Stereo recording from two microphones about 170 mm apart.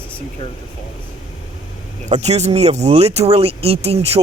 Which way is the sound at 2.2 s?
40° right (ahead or behind).